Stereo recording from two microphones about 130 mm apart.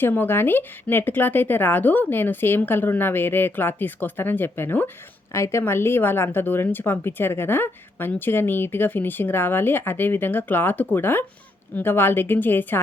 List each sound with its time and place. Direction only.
0.0 s a woman's voice: 15° left (ahead or behind)